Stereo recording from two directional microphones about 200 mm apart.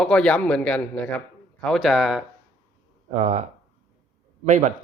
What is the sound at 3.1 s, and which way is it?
Speech, 35° right (ahead or behind).